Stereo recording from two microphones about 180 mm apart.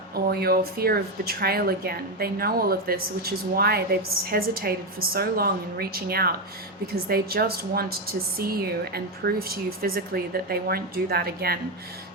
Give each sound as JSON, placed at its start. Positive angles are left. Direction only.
{"t": 0.1, "sound": "speech", "side_deg": -60}